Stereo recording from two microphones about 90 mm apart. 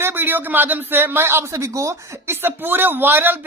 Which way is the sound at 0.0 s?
20° right (ahead or behind).